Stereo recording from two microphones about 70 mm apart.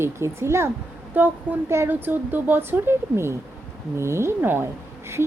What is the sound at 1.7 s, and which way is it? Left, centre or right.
Speech, right.